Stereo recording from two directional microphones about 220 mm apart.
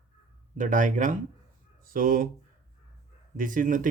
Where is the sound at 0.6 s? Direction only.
35° right (ahead or behind).